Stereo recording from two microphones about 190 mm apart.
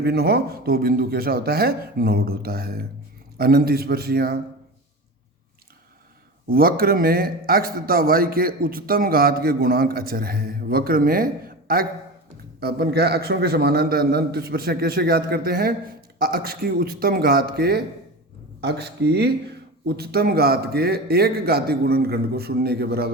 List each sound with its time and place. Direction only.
0.0 s a man's voice: 60° right (ahead or behind)
6.5 s a man's voice: 50° right (ahead or behind)